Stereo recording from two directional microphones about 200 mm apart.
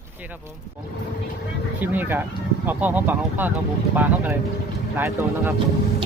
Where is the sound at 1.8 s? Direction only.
10° right (ahead or behind).